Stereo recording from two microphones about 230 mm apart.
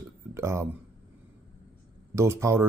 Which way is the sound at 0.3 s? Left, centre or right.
Centre.